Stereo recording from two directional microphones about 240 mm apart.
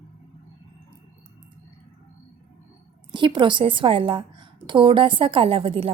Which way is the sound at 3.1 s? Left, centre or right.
Centre.